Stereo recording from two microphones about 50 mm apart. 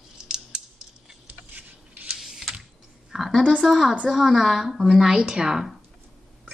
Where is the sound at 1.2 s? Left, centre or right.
Right.